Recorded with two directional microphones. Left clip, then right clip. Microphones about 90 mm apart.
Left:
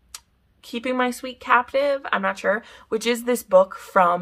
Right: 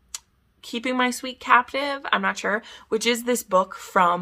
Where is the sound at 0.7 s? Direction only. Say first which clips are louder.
Even; 25° right (ahead or behind).